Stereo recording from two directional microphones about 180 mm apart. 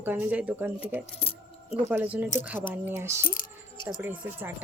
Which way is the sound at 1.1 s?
30° left (ahead or behind).